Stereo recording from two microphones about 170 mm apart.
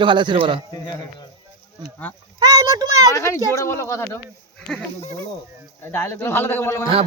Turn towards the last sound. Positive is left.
turn(degrees=15)  # may be behind; listen again after turning